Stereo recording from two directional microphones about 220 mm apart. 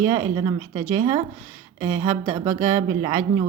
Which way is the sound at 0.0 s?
15° right (ahead or behind).